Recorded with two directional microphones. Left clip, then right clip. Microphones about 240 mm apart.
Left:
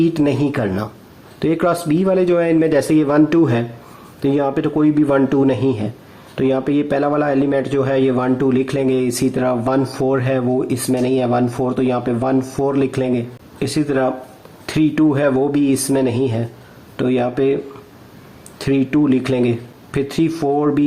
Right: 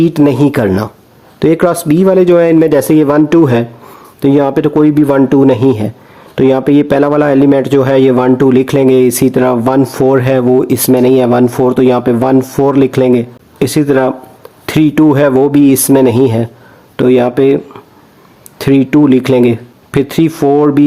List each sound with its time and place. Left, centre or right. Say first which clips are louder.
0.0 s speech: right 8 dB; right
18.6 s speech: right 8 dB; right